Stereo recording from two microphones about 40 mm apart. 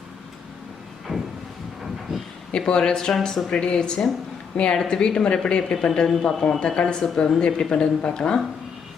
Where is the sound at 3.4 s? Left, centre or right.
Left.